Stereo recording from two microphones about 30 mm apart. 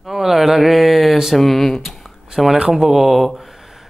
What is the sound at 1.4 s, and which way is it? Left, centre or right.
Speech, centre.